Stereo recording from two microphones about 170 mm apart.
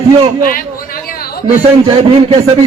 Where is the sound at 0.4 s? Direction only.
55° left (ahead or behind).